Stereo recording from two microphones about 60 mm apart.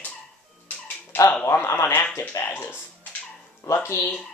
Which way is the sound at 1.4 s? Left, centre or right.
Left.